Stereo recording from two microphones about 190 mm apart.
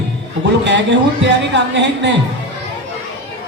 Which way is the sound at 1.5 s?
70° right (ahead or behind).